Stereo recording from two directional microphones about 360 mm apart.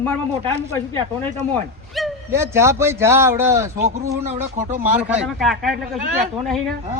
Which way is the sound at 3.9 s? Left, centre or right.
Centre.